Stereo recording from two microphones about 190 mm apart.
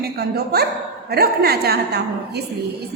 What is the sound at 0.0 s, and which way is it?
A woman's voice, 55° right (ahead or behind).